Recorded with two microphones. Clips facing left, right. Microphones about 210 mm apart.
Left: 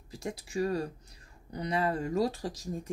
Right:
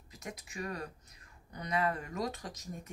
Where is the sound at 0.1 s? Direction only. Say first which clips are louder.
Left 9 dB; 30° left (ahead or behind).